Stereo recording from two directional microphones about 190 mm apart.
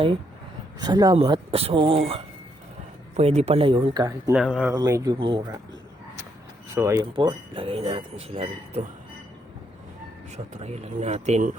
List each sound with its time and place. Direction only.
0.8 s speech: 20° right (ahead or behind)
4.4 s speech: 5° right (ahead or behind)
4.7 s speech: 15° right (ahead or behind)
6.7 s speech: 15° right (ahead or behind); by 8.9 s 30° right (ahead or behind)
10.3 s speech: 35° right (ahead or behind)